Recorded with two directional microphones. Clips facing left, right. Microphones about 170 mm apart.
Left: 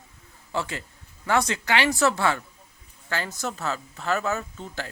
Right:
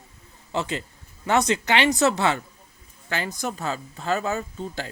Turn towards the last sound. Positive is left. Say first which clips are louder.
# right 3 dB
turn(degrees=-15)  # may be behind; listen again after turning